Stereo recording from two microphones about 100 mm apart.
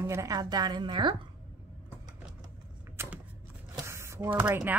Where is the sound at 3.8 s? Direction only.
25° right (ahead or behind).